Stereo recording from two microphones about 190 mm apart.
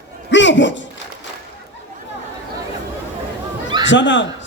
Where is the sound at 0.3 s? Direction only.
70° left (ahead or behind).